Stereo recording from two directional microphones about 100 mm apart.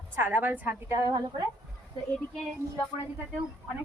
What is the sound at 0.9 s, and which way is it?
Speech, 35° right (ahead or behind).